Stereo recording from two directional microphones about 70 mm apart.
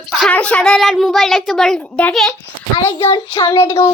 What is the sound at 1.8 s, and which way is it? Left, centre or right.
Speech, centre.